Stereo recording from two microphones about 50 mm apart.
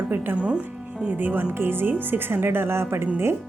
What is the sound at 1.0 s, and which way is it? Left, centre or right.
Speech, right.